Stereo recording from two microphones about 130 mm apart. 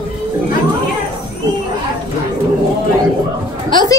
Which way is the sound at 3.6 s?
35° left (ahead or behind).